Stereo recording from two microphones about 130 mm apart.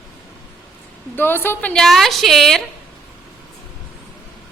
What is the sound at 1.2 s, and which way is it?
A woman's voice, 15° left (ahead or behind).